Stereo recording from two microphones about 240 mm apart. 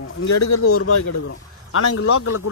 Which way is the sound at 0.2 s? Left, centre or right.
Left.